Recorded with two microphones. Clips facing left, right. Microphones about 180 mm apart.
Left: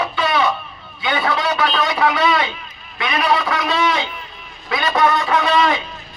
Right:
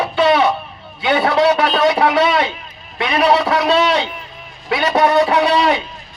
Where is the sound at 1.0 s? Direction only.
30° right (ahead or behind).